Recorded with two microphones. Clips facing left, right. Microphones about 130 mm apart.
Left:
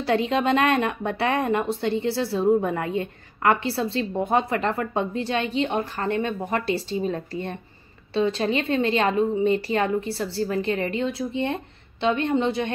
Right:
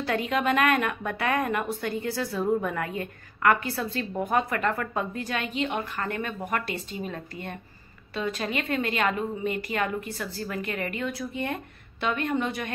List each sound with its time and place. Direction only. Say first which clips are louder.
0.0 s a woman's voice: left 4 dB; 30° left (ahead or behind)